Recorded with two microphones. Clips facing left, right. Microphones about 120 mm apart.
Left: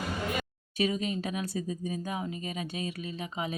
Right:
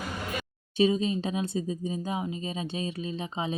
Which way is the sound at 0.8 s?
25° right (ahead or behind).